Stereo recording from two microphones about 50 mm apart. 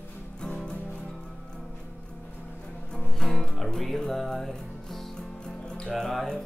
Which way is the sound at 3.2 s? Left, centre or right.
Centre.